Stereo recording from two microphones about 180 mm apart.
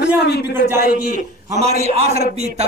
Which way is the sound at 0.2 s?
65° left (ahead or behind).